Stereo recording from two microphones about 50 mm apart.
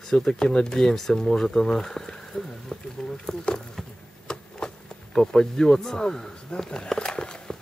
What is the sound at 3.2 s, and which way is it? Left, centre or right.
Insect, centre.